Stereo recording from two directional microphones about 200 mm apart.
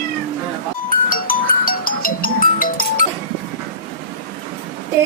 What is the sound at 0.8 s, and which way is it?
Music, 45° left (ahead or behind).